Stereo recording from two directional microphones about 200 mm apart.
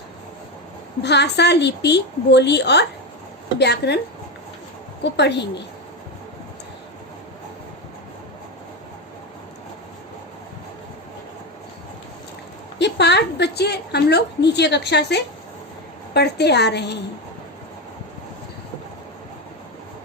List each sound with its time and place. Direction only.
1.0 s a woman's voice: 60° left (ahead or behind)
5.1 s a woman's voice: 60° left (ahead or behind)
12.8 s a woman's voice: 55° left (ahead or behind)